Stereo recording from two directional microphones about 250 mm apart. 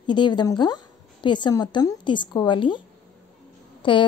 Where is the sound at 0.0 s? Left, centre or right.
Centre.